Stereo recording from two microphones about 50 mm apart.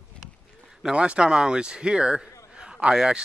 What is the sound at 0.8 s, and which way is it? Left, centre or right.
A man's voice, centre.